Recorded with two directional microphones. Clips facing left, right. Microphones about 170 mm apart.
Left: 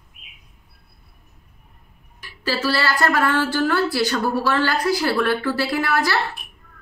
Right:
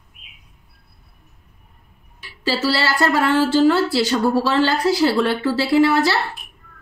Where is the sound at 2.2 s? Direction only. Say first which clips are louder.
Right 2 dB; 25° right (ahead or behind).